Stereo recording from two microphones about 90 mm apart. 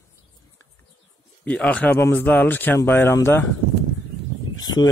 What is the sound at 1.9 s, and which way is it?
Speech, 25° left (ahead or behind).